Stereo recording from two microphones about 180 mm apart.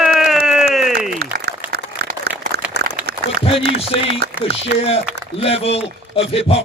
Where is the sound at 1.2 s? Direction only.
60° right (ahead or behind).